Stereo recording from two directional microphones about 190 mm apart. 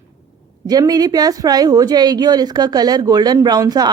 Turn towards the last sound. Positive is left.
turn(degrees=-20)  # may be behind; listen again after turning